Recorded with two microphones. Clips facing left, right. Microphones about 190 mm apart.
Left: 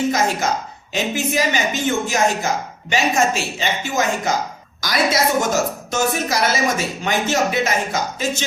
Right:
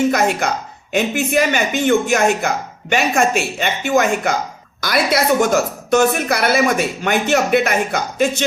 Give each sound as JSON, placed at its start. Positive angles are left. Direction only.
{"t": 0.1, "sound": "speech", "side_deg": -60}